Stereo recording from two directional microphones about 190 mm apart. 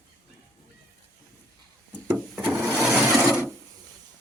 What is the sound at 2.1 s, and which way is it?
Wood, 5° right (ahead or behind).